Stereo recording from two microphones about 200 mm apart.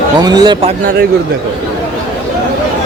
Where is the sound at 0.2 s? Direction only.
20° right (ahead or behind).